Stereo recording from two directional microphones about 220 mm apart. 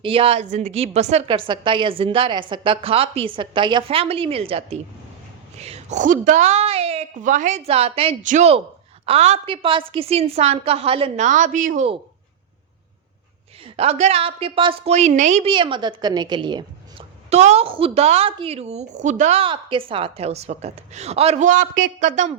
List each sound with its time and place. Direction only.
0.0 s a woman's voice: 25° right (ahead or behind)
13.7 s a woman's voice: 30° right (ahead or behind)